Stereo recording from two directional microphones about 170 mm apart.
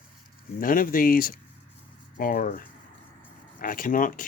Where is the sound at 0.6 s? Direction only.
55° left (ahead or behind).